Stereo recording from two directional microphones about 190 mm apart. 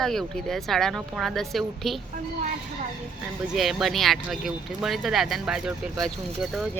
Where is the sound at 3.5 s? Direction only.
Centre (ahead or behind).